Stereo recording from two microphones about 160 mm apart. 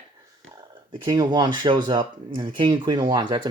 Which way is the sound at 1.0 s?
25° right (ahead or behind).